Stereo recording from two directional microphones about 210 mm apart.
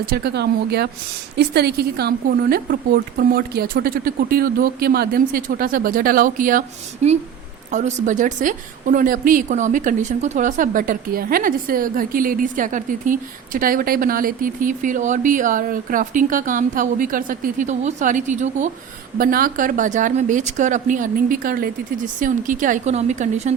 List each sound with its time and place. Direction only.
0.1 s a woman's voice: 50° right (ahead or behind); by 23.6 s 35° right (ahead or behind)